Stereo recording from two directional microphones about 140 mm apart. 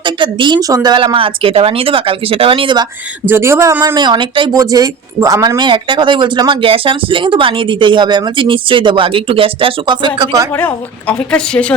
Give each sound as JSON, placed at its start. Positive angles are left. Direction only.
{"t": 0.0, "sound": "speech", "side_deg": -35}
{"t": 3.2, "sound": "speech", "side_deg": -15}
{"t": 3.9, "sound": "speech", "side_deg": -30}
{"t": 10.2, "sound": "speech", "side_deg": -25}
{"t": 10.5, "sound": "a woman's voice", "side_deg": 10}